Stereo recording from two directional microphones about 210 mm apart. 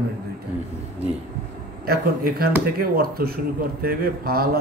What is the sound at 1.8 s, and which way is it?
A man's voice, 45° right (ahead or behind).